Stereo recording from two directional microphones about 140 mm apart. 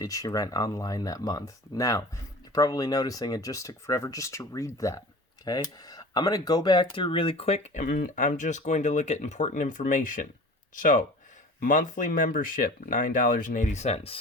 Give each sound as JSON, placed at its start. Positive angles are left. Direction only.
{"t": 0.0, "sound": "speech", "side_deg": 25}